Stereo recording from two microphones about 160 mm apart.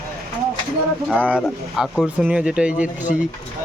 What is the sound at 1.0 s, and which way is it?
Speech, 10° right (ahead or behind).